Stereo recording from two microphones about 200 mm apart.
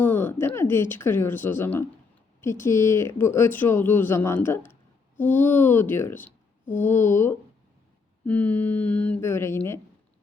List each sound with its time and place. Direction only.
0.0 s speech: 10° left (ahead or behind)